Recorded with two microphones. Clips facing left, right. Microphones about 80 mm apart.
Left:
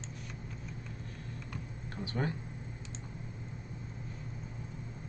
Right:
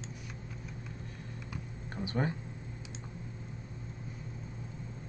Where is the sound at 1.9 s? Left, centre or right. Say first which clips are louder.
Right 2 dB; centre.